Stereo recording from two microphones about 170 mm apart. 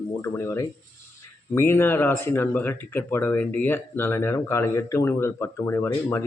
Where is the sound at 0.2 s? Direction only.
15° left (ahead or behind).